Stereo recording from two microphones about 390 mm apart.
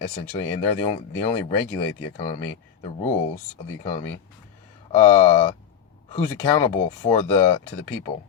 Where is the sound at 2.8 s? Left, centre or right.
Centre.